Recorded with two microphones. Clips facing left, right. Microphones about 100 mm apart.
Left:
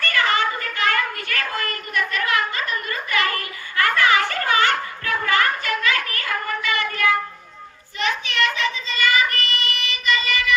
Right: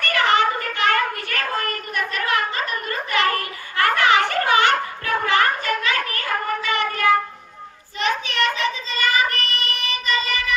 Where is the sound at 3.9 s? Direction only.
25° right (ahead or behind).